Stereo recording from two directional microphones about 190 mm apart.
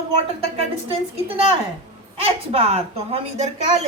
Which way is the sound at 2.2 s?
30° right (ahead or behind).